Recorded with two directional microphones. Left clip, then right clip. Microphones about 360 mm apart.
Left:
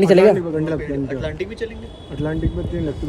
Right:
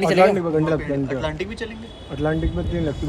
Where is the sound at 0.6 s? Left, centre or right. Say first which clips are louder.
Right 1 dB; centre.